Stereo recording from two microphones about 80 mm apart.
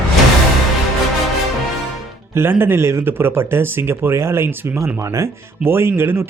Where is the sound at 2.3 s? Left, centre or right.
Right.